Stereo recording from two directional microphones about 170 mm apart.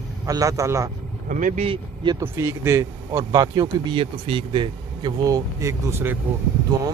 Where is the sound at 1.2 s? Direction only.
50° right (ahead or behind).